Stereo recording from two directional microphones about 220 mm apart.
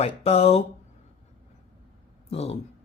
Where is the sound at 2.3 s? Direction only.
30° left (ahead or behind).